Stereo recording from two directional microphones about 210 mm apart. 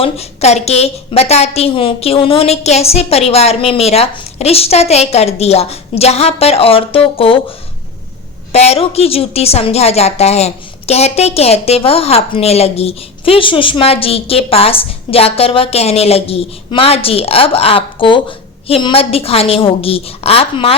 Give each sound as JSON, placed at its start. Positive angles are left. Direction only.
{"t": 0.0, "sound": "a woman's voice", "side_deg": 30}
{"t": 8.5, "sound": "a woman's voice", "side_deg": 30}